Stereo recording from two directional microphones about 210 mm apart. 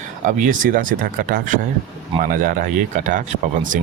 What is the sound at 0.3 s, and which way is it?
Speech, 40° right (ahead or behind).